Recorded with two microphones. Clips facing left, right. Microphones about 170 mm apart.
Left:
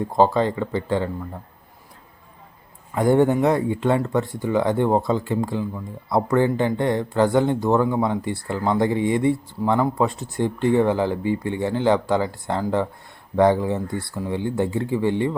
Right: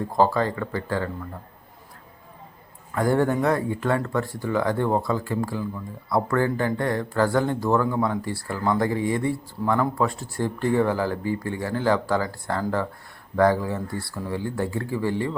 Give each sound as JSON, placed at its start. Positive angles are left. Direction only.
{"t": 0.2, "sound": "speech", "side_deg": 20}
{"t": 2.9, "sound": "speech", "side_deg": 20}